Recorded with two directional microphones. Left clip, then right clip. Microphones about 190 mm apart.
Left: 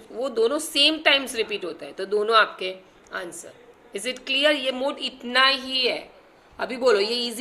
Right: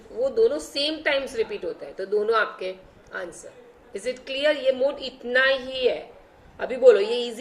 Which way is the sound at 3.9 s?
50° left (ahead or behind).